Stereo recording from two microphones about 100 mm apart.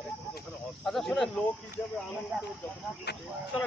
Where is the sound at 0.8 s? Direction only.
5° left (ahead or behind).